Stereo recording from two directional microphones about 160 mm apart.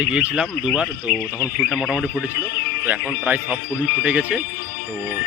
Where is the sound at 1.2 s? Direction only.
10° left (ahead or behind).